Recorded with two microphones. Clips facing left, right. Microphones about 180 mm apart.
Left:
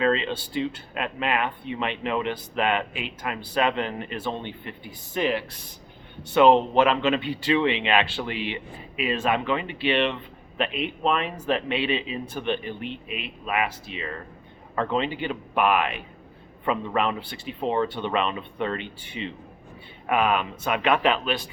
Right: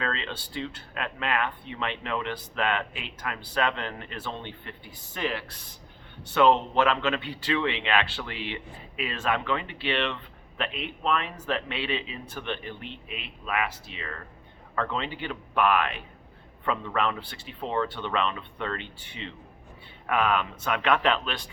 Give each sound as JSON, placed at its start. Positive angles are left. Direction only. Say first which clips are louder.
{"t": 0.0, "sound": "speech", "louder": "left 9 dB", "side_deg": 15}